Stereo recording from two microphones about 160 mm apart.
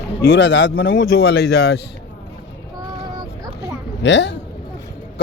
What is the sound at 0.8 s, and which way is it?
Speech, 90° left.